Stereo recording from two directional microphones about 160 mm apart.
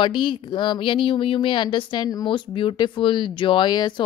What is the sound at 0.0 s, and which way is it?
Speech, 30° left (ahead or behind).